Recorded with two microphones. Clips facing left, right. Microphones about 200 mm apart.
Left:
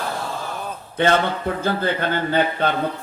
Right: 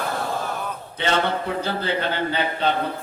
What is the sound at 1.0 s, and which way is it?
A man's voice, 50° left (ahead or behind).